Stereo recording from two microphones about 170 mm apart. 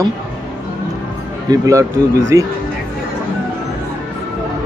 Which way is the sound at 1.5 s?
20° right (ahead or behind).